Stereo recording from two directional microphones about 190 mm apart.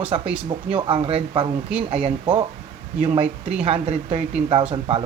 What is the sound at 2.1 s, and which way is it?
Speech, 25° right (ahead or behind).